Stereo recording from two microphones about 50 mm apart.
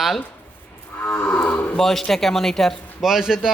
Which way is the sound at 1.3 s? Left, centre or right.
Left.